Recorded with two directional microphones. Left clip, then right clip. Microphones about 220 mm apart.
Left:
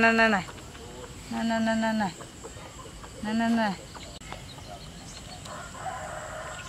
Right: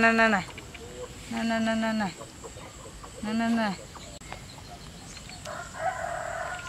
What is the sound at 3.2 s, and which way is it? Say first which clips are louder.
Speech: left 1 dB; centre (ahead or behind).